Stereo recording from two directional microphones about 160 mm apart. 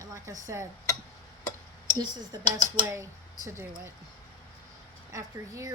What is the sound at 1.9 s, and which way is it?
Speech, 25° right (ahead or behind).